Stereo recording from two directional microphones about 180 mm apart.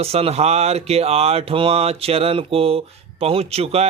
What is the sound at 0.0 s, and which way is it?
Speech, 35° right (ahead or behind).